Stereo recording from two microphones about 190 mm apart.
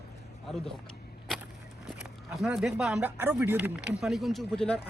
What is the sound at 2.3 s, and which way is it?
Speech, centre (ahead or behind).